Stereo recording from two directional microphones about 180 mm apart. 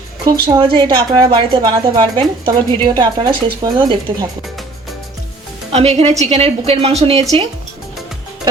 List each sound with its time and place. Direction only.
0.3 s speech: 25° right (ahead or behind)
5.7 s a woman's voice: 35° right (ahead or behind)